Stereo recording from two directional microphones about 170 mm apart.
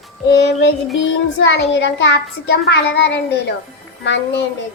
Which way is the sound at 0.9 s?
90° left.